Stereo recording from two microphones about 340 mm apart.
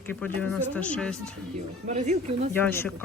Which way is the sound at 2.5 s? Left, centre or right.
Centre.